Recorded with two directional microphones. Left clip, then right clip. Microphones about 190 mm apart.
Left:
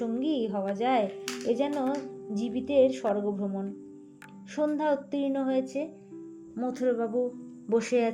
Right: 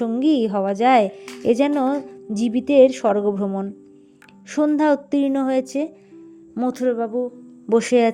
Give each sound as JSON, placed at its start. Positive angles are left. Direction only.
{"t": 0.0, "sound": "a woman's voice", "side_deg": -45}